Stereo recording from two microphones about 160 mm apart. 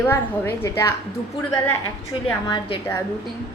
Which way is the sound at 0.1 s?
15° left (ahead or behind).